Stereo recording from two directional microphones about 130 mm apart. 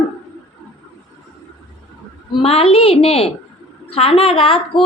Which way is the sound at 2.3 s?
50° left (ahead or behind).